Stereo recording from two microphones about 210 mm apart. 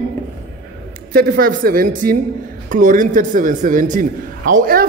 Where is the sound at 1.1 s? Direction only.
45° right (ahead or behind).